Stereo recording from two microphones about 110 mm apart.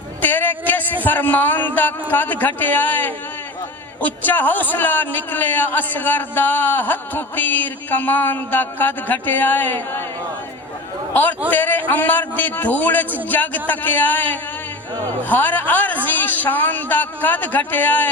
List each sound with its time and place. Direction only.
0.2 s music: 15° left (ahead or behind)
1.0 s a man's voice: 15° left (ahead or behind)
11.1 s a man's voice: 15° left (ahead or behind)